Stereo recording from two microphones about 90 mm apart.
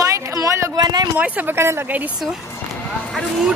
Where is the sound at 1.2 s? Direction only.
15° right (ahead or behind).